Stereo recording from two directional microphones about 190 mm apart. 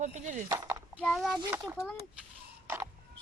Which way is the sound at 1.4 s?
15° right (ahead or behind).